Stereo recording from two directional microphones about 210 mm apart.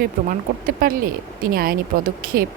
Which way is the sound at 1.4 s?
45° right (ahead or behind).